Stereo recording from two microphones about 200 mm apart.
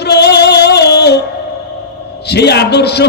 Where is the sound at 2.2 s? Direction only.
55° left (ahead or behind).